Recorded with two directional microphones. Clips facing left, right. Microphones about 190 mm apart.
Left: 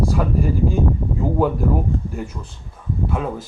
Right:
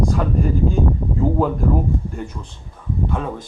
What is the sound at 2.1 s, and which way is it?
Speech, 5° left (ahead or behind).